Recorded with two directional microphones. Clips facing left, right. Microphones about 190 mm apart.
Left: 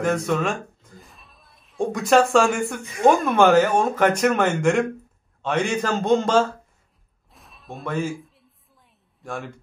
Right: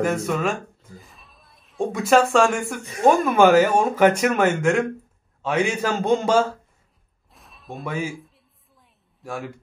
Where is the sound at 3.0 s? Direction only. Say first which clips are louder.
Right 1 dB; 5° right (ahead or behind).